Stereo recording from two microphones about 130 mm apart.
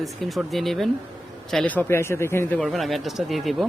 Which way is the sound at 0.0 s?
Centre (ahead or behind).